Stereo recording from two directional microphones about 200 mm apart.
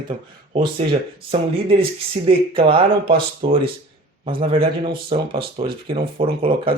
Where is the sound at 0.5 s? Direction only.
25° right (ahead or behind).